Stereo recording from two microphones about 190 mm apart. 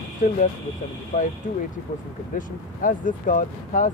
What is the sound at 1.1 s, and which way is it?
Speech, 45° left (ahead or behind).